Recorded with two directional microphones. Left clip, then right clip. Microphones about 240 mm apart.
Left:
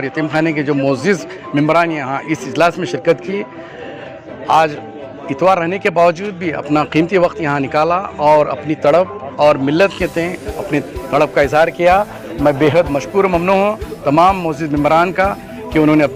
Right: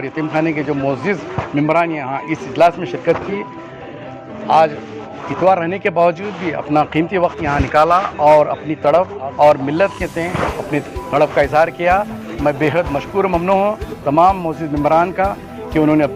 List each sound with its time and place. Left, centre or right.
0.0 s speech: left
4.4 s a man's voice: left